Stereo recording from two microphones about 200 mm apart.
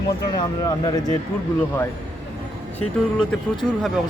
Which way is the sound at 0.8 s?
20° left (ahead or behind).